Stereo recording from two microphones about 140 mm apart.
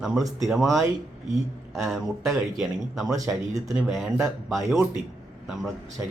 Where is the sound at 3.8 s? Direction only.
Centre (ahead or behind).